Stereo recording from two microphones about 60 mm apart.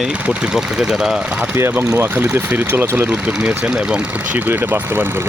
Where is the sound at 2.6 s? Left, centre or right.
Right.